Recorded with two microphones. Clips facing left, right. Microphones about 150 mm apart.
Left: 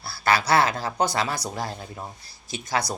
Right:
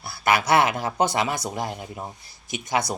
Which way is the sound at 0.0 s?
20° right (ahead or behind).